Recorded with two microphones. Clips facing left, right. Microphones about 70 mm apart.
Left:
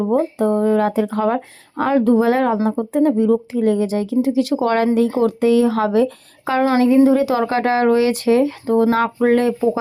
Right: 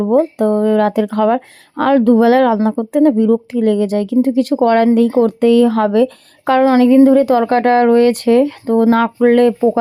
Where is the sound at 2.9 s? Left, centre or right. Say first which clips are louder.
Right 4 dB; right.